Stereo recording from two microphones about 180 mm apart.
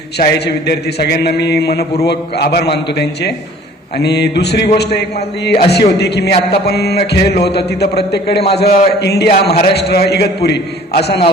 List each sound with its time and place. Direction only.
0.2 s a man's voice: 65° left (ahead or behind)